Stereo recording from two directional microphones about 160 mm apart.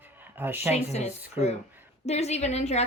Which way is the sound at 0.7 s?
40° left (ahead or behind).